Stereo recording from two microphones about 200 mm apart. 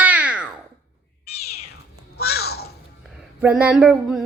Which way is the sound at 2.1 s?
50° left (ahead or behind).